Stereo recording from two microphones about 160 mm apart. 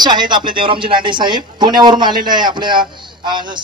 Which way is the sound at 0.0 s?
30° right (ahead or behind).